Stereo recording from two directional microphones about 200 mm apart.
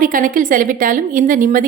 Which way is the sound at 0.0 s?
45° right (ahead or behind).